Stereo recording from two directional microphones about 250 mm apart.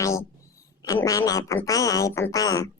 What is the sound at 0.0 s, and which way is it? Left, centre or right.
A woman's voice, centre.